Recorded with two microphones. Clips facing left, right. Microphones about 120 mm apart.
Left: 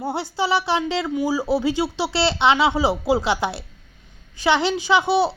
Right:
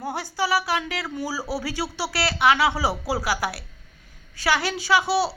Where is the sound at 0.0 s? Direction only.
25° left (ahead or behind).